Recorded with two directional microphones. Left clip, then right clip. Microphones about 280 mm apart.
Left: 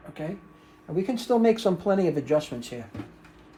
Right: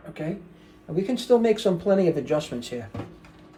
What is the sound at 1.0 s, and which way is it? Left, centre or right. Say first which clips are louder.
Speech: right 3 dB; centre.